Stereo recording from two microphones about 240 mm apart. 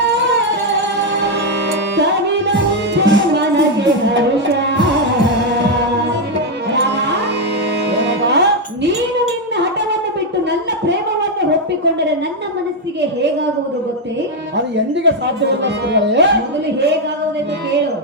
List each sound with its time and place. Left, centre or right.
2.0 s music: right
6.7 s music: right
15.0 s speech: right